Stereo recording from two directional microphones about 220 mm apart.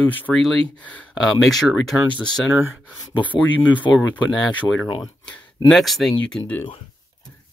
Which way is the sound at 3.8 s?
20° left (ahead or behind).